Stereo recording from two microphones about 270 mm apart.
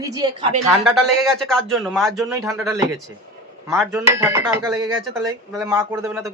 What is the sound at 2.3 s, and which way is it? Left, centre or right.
A woman's voice, centre.